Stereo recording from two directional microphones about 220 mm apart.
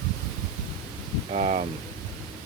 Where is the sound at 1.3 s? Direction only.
35° right (ahead or behind).